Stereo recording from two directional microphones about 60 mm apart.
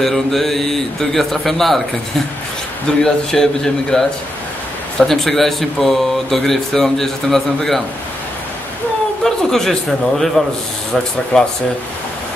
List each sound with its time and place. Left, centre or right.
0.0 s speech: centre
9.2 s a man's voice: centre
11.3 s speech: centre